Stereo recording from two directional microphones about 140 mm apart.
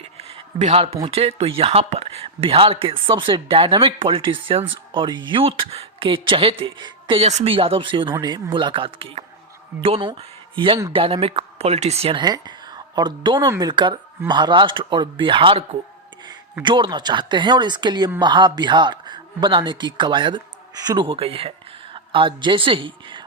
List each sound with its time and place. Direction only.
0.0 s a sound: 45° right (ahead or behind)
1.1 s speech: 45° right (ahead or behind)
7.2 s speech: 50° right (ahead or behind)
12.2 s speech: 30° right (ahead or behind)
21.1 s a man's voice: 40° right (ahead or behind)